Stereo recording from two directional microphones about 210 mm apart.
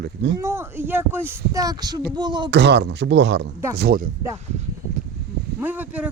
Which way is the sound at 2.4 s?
55° right (ahead or behind).